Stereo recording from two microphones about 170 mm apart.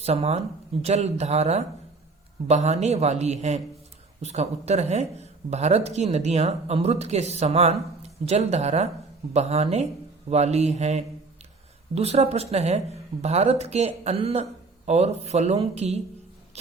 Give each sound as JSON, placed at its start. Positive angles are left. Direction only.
{"t": 0.0, "sound": "speech", "side_deg": -35}